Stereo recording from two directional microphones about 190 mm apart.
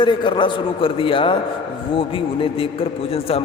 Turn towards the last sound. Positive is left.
turn(degrees=30)  # may be behind; listen again after turning